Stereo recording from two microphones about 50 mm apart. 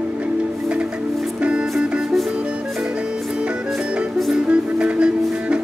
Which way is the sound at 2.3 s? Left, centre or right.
Right.